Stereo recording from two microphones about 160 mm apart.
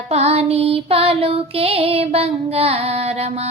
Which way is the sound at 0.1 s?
40° right (ahead or behind).